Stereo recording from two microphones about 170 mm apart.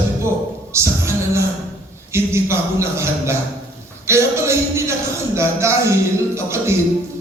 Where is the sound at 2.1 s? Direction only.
15° right (ahead or behind).